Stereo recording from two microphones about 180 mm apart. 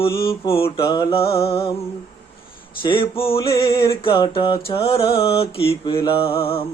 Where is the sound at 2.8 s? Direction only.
30° left (ahead or behind).